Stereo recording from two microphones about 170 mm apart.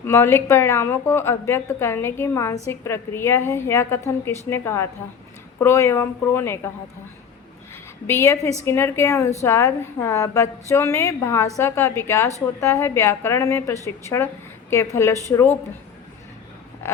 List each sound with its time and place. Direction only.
0.0 s a woman's voice: 15° left (ahead or behind)
8.0 s a woman's voice: 15° left (ahead or behind)
16.8 s a sound: 15° left (ahead or behind)